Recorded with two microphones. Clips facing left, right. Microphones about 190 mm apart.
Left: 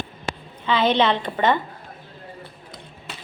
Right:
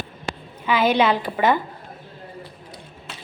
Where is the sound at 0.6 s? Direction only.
10° right (ahead or behind).